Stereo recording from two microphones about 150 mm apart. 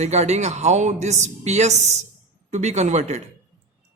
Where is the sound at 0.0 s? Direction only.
45° right (ahead or behind).